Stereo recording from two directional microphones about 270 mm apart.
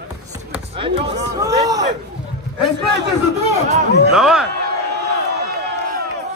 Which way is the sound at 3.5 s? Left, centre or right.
Right.